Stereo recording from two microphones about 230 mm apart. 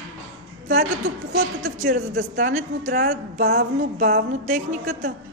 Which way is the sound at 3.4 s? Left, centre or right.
Right.